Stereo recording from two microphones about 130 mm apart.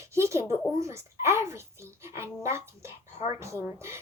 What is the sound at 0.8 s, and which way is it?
A child's voice, 20° right (ahead or behind).